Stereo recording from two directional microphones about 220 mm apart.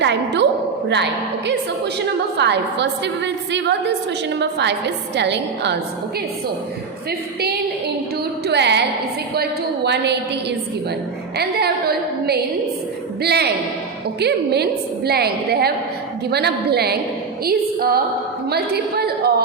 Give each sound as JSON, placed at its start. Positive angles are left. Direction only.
{"t": 0.0, "sound": "a woman's voice", "side_deg": -50}
{"t": 8.4, "sound": "a woman's voice", "side_deg": -50}
{"t": 11.3, "sound": "a woman's voice", "side_deg": -45}
{"t": 17.4, "sound": "female singing", "side_deg": -45}
{"t": 18.4, "sound": "a woman's voice", "side_deg": -45}